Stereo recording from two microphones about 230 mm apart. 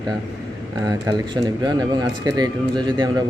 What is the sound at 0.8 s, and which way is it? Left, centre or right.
Speech, centre.